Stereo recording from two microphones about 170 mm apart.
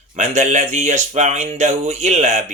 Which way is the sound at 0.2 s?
45° right (ahead or behind).